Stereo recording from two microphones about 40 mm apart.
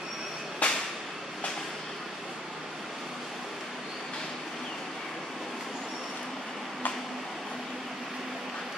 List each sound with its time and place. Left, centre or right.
0.6 s whip: left